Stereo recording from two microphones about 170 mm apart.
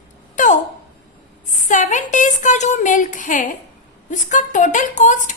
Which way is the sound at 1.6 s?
45° left (ahead or behind).